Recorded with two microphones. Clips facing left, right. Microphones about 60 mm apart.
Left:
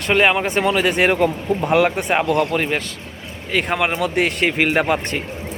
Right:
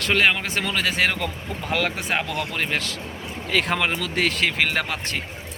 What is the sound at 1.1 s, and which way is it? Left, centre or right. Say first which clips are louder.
Speech: left 11 dB; left.